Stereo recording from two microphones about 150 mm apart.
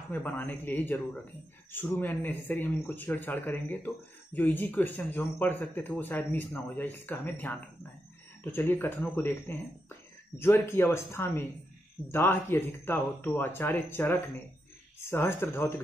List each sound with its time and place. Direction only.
0.1 s speech: 10° left (ahead or behind)